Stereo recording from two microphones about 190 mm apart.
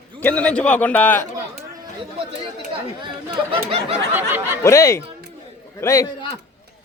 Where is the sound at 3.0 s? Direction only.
25° right (ahead or behind).